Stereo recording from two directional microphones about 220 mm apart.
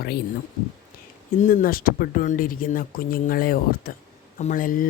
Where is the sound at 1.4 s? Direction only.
35° left (ahead or behind).